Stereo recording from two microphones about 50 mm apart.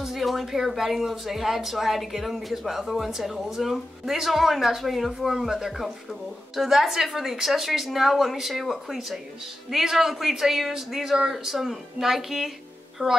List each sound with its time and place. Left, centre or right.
0.0 s a woman's voice: centre
13.0 s speech: right